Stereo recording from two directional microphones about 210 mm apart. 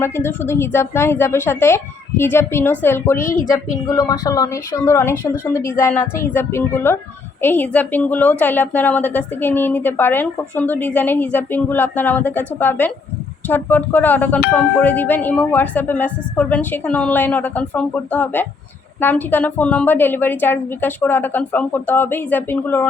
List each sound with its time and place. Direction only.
0.0 s a woman's voice: 10° left (ahead or behind)